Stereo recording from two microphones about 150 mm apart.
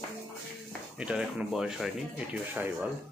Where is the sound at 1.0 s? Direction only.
5° right (ahead or behind).